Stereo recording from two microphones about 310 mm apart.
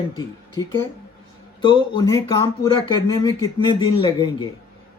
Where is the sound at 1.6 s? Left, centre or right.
Centre.